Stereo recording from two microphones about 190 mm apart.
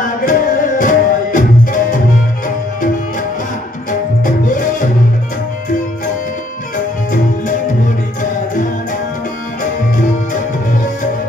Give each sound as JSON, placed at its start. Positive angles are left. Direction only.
{"t": 0.2, "sound": "music", "side_deg": 45}